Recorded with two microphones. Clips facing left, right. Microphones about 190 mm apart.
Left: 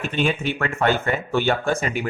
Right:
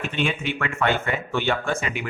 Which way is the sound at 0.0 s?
40° left (ahead or behind).